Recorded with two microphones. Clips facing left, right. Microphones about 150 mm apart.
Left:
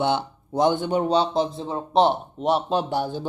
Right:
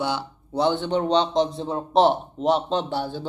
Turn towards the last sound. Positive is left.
turn(degrees=15)  # may be behind; listen again after turning